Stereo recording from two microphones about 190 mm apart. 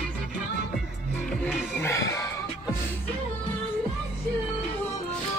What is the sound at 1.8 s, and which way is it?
Music, 15° left (ahead or behind).